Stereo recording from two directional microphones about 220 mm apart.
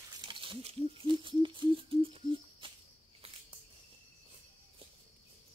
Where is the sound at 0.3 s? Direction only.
25° right (ahead or behind).